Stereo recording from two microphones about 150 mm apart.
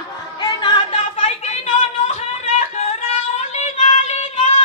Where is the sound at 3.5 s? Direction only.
50° left (ahead or behind).